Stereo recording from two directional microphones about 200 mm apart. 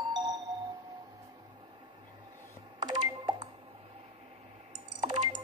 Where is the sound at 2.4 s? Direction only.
20° right (ahead or behind).